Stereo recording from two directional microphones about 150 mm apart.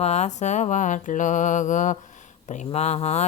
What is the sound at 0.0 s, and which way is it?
Speech, 45° left (ahead or behind).